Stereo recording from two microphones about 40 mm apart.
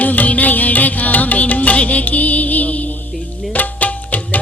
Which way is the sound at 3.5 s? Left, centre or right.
Left.